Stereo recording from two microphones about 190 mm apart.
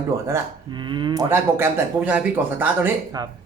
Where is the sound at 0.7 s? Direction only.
25° right (ahead or behind).